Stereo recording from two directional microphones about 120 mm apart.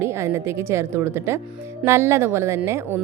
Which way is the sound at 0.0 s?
20° right (ahead or behind).